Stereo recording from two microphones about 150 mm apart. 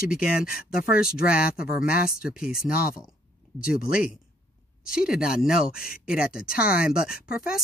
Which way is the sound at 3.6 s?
70° left (ahead or behind).